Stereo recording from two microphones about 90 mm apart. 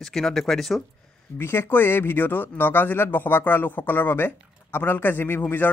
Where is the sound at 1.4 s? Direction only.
25° left (ahead or behind).